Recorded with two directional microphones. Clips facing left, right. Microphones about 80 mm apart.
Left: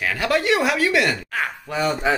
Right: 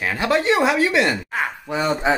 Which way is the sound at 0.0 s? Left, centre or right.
Right.